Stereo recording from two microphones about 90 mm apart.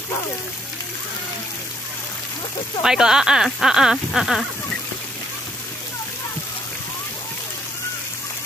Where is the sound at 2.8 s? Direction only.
5° right (ahead or behind).